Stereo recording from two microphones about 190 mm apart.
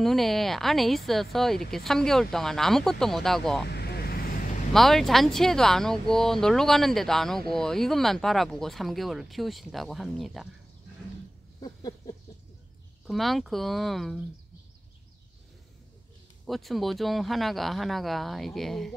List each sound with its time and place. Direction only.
0.0 s speech: centre (ahead or behind)
3.7 s vehicle: 55° left (ahead or behind)
4.7 s speech: centre (ahead or behind)
11.6 s a sound: 20° left (ahead or behind)
13.0 s speech: centre (ahead or behind)
16.4 s speech: centre (ahead or behind)